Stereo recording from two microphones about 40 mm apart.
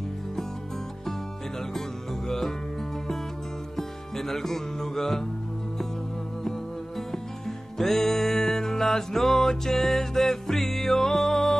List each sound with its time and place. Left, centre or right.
2.2 s music: centre
3.7 s music: centre
7.1 s music: centre